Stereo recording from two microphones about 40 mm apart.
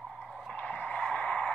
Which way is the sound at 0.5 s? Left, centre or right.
Left.